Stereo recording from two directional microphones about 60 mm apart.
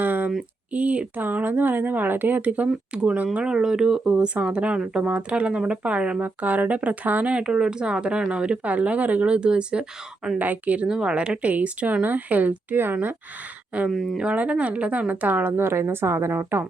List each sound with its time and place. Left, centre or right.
0.0 s a sound: right
0.7 s speech: right
3.3 s speech: centre
7.3 s speech: centre
10.3 s speech: right
10.8 s speech: centre; by 13.1 s right
13.9 s speech: centre
14.2 s speech: right